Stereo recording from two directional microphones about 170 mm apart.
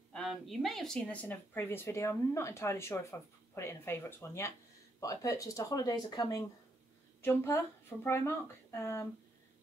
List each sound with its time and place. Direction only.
0.1 s speech: centre (ahead or behind); by 9.1 s 15° left (ahead or behind)